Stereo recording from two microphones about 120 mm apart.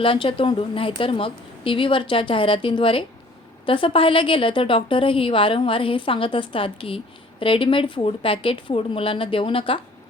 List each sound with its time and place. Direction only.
0.0 s a woman's voice: 50° left (ahead or behind)